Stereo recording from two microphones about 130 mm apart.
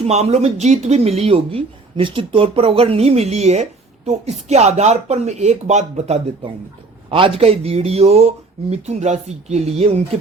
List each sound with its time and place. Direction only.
0.0 s speech: 55° right (ahead or behind)
7.1 s speech: 45° right (ahead or behind)